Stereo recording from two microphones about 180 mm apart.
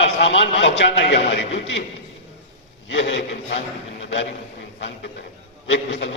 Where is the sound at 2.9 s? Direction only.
80° left.